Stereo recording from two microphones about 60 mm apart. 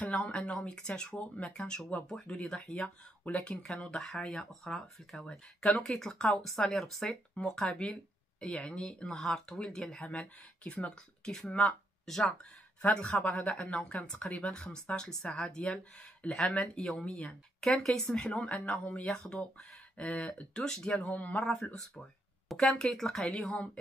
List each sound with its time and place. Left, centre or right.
0.0 s speech: centre
10.0 s speech: centre
10.9 s speech: centre
12.9 s speech: left
17.6 s speech: centre
21.0 s speech: left
21.4 s speech: centre